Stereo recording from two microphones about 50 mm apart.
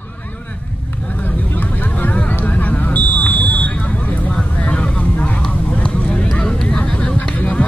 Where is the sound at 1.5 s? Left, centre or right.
Left.